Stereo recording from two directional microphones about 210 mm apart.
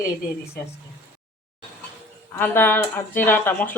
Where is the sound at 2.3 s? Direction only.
10° left (ahead or behind).